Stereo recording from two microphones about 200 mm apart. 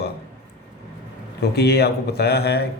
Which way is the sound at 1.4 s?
55° left (ahead or behind).